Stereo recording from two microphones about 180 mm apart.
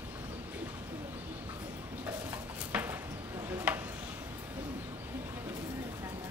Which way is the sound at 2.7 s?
5° right (ahead or behind).